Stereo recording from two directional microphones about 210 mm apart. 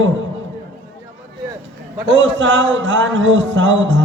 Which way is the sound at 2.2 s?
60° right (ahead or behind).